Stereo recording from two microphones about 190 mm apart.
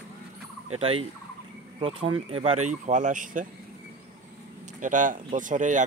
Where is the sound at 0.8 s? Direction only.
30° right (ahead or behind).